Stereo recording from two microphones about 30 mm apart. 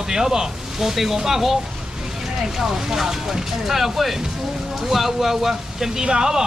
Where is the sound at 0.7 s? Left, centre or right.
Centre.